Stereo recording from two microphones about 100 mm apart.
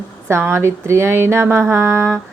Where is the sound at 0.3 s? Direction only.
25° right (ahead or behind).